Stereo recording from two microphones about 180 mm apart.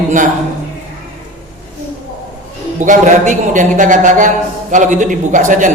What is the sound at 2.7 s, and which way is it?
A man's voice, 45° right (ahead or behind).